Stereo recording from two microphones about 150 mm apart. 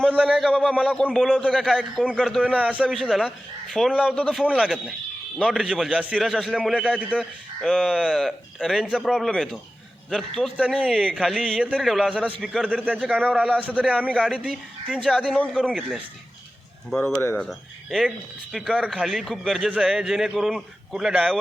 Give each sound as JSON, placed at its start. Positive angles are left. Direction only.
{"t": 0.1, "sound": "speech", "side_deg": -10}
{"t": 0.4, "sound": "a man's voice", "side_deg": 5}
{"t": 7.1, "sound": "a man's voice", "side_deg": 5}
{"t": 17.3, "sound": "a man's voice", "side_deg": 0}